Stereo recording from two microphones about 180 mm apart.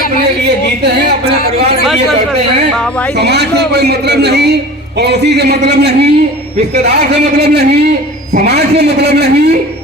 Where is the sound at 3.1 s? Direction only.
70° right (ahead or behind).